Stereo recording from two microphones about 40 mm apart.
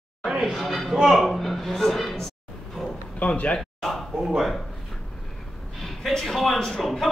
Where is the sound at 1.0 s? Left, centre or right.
Centre.